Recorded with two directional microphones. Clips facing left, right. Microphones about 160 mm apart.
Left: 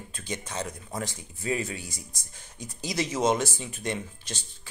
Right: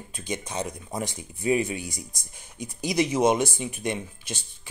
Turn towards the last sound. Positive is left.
turn(degrees=-15)  # may be behind; listen again after turning